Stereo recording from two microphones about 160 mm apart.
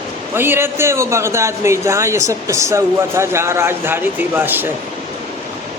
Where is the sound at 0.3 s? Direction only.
15° right (ahead or behind).